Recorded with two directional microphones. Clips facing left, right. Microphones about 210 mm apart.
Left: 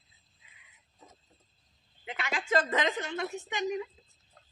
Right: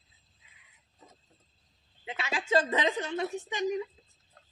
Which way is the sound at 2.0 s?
25° right (ahead or behind).